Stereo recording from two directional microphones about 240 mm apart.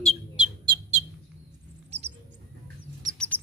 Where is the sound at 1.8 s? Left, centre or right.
Right.